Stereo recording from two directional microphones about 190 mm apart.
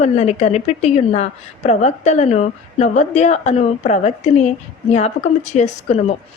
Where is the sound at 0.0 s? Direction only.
35° left (ahead or behind).